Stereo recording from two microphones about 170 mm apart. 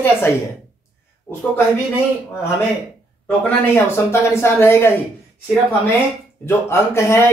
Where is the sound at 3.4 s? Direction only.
10° left (ahead or behind).